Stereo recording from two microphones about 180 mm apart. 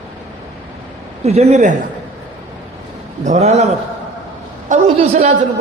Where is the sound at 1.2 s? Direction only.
35° right (ahead or behind).